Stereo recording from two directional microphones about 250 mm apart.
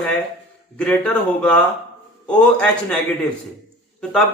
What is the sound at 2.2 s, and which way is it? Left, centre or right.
Speech, centre.